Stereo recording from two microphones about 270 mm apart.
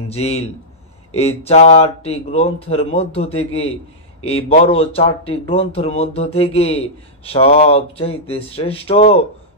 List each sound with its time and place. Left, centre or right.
0.1 s speech: left